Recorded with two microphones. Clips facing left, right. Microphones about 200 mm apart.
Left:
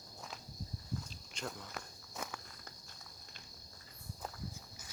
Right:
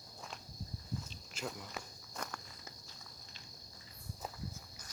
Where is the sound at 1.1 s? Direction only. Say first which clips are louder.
Right 1 dB; 5° right (ahead or behind).